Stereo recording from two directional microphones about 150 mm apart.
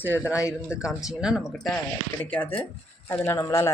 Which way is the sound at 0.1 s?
10° right (ahead or behind).